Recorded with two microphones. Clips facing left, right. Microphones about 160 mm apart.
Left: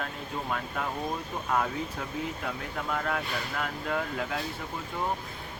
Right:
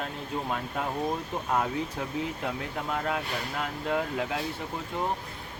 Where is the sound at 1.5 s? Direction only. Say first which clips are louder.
Right 1 dB; 10° right (ahead or behind).